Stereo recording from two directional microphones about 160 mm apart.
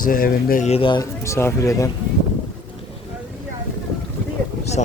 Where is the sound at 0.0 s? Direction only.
60° left (ahead or behind).